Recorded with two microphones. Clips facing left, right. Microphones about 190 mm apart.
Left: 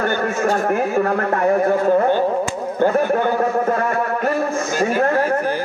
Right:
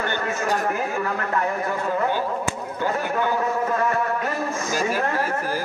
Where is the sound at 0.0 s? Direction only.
50° left (ahead or behind).